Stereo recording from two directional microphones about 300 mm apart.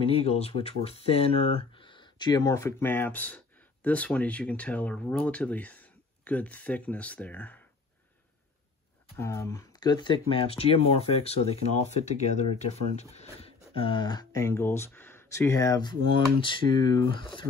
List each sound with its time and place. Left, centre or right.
0.0 s speech: centre
9.1 s speech: centre